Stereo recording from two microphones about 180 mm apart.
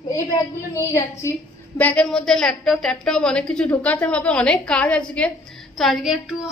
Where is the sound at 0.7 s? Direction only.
15° left (ahead or behind); by 6.4 s 5° right (ahead or behind).